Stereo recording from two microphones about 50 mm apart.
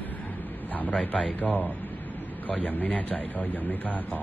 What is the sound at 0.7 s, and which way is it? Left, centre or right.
Speech, left.